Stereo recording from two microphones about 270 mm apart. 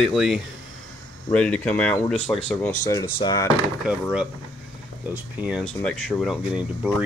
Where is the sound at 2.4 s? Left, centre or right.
Centre.